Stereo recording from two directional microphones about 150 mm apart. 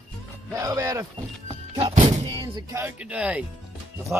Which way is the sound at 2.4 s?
20° right (ahead or behind).